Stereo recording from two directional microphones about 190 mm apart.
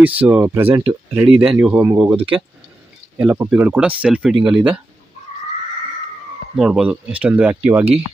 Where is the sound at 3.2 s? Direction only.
15° right (ahead or behind).